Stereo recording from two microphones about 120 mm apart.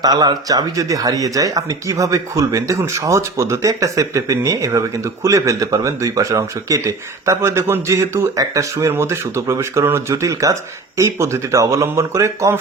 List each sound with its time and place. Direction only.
0.0 s speech: 35° right (ahead or behind)